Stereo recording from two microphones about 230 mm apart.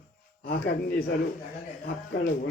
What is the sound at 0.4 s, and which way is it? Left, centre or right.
Speech, left.